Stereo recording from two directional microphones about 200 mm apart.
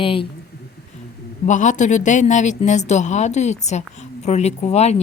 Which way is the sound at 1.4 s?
40° left (ahead or behind).